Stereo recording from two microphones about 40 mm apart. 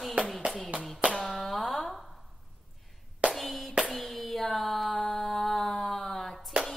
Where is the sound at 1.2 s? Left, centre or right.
Centre.